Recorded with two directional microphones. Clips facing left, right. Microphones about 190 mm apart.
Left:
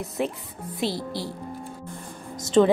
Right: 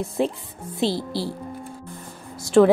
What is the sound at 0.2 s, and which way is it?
Speech, 30° right (ahead or behind).